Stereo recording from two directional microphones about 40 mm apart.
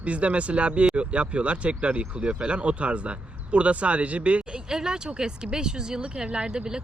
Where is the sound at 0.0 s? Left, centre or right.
Right.